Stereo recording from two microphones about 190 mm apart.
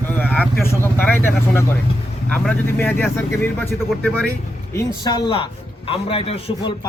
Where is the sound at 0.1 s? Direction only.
10° left (ahead or behind).